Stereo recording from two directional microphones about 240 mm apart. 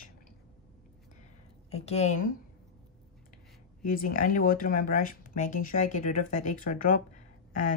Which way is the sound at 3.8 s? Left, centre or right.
Left.